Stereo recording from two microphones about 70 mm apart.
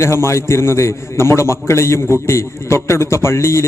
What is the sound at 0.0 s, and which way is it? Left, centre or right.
A man's voice, left.